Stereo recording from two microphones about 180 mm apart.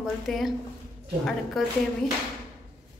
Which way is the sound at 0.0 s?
Centre (ahead or behind).